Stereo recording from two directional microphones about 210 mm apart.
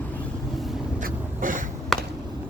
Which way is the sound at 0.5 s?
Centre (ahead or behind).